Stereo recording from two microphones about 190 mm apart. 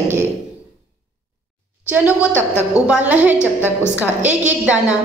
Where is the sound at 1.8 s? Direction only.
10° right (ahead or behind).